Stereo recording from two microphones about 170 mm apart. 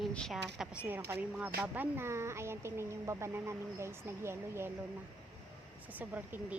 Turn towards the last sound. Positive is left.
turn(degrees=-10)  # may be behind; listen again after turning